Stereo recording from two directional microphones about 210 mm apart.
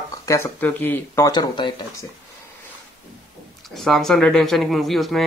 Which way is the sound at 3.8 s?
Centre (ahead or behind).